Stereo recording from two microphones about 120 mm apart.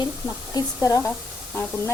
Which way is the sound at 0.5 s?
30° left (ahead or behind).